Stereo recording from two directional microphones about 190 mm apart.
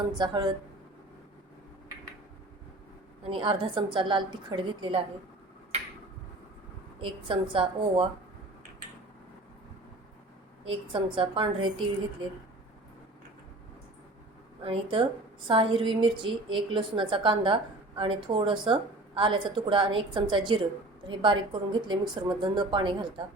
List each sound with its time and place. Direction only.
0.1 s a woman's voice: 25° right (ahead or behind)
3.2 s a woman's voice: 25° right (ahead or behind)
7.0 s a woman's voice: 25° right (ahead or behind)
10.7 s a woman's voice: 30° right (ahead or behind)
14.6 s a woman's voice: 30° right (ahead or behind)